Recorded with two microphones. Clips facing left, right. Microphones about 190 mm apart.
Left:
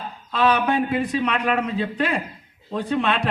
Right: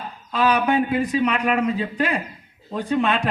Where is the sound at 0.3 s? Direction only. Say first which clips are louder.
Even; 5° right (ahead or behind).